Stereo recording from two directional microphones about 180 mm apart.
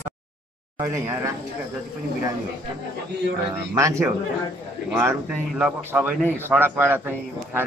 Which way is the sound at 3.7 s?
15° right (ahead or behind).